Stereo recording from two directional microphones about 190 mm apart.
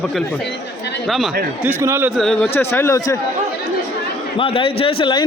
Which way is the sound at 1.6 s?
10° right (ahead or behind).